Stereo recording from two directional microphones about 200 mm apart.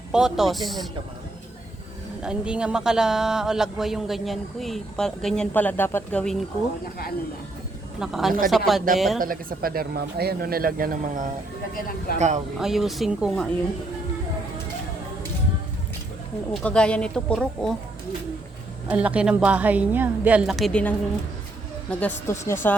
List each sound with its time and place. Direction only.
0.1 s a man's voice: 5° right (ahead or behind)
2.2 s a man's voice: 5° right (ahead or behind)
7.9 s a man's voice: centre (ahead or behind)
9.2 s speech: 45° right (ahead or behind)
12.1 s speech: 50° left (ahead or behind)
12.5 s a man's voice: centre (ahead or behind)
16.6 s a man's voice: 5° left (ahead or behind)
18.9 s a woman's voice: 5° right (ahead or behind); by 22.7 s 10° left (ahead or behind)